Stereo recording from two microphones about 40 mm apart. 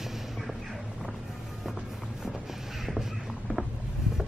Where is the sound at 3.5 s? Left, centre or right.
Left.